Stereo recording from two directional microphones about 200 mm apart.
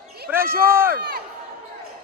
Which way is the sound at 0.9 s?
55° right (ahead or behind).